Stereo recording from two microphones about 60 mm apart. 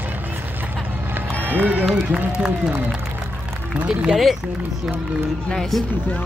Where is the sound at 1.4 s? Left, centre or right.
Right.